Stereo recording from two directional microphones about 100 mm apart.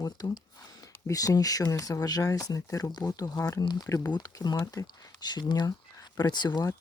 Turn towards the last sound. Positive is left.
turn(degrees=45)  # may be behind; listen again after turning